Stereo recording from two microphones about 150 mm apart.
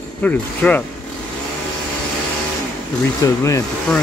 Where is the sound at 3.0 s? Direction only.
20° left (ahead or behind).